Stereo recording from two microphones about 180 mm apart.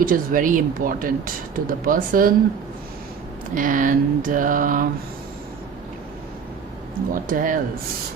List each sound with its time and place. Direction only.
0.0 s speech: 50° right (ahead or behind)
3.5 s speech: 45° right (ahead or behind)
7.3 s speech: 50° right (ahead or behind)